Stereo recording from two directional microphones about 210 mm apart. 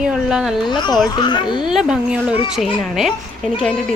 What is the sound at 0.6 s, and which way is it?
Speech, 20° left (ahead or behind).